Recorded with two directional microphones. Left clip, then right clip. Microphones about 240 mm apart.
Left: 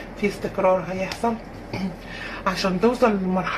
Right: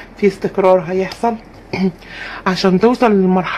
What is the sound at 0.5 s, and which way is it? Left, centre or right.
Speech, right.